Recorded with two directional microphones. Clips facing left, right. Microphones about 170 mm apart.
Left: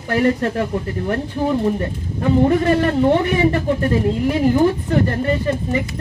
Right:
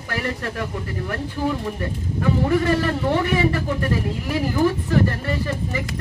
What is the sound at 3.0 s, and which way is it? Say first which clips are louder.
Speech: left 4 dB; 25° left (ahead or behind).